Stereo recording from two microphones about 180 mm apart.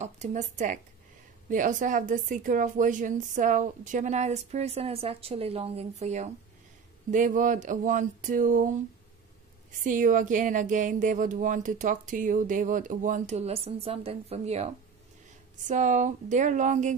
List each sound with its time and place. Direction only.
0.0 s a woman's voice: 40° right (ahead or behind)
9.8 s a woman's voice: 45° right (ahead or behind)